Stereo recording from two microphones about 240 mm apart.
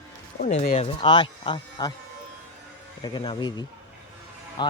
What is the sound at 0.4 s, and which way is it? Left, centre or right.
Speech, left.